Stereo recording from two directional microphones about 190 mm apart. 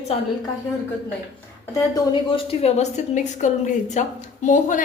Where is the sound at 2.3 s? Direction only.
30° left (ahead or behind).